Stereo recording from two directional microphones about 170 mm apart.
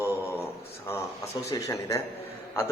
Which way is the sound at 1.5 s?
20° left (ahead or behind).